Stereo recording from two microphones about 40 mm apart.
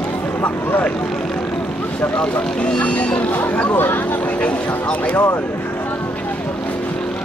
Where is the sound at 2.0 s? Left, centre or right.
Left.